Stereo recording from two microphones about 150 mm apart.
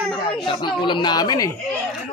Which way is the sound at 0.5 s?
30° left (ahead or behind).